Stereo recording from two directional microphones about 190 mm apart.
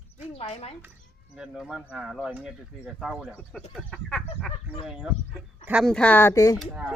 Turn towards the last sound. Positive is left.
turn(degrees=-5)  # may be behind; listen again after turning